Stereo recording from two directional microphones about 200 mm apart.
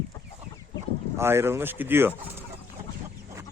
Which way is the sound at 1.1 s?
10° right (ahead or behind).